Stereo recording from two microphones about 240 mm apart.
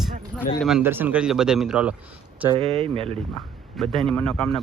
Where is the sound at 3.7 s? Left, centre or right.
Centre.